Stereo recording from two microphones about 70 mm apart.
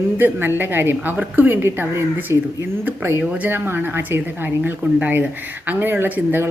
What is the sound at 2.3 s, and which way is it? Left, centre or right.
Speech, right.